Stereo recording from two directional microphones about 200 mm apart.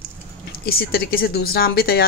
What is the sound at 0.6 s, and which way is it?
A woman's voice, 50° left (ahead or behind).